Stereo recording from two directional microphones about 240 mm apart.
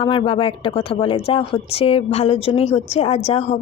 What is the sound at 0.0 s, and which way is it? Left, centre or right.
Speech, left.